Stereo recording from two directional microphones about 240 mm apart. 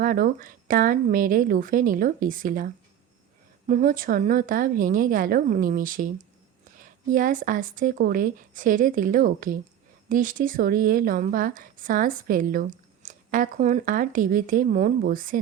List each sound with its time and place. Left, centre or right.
0.0 s a woman's voice: right
3.7 s a woman's voice: right